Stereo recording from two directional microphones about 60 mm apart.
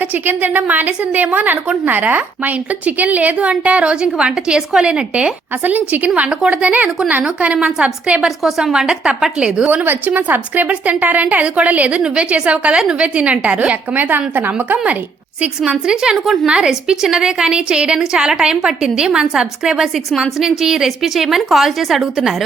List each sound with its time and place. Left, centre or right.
0.1 s a woman's voice: right
5.6 s a woman's voice: right
8.4 s a woman's voice: centre
9.6 s a woman's voice: right
15.4 s a woman's voice: centre
16.1 s a woman's voice: centre
16.5 s a woman's voice: centre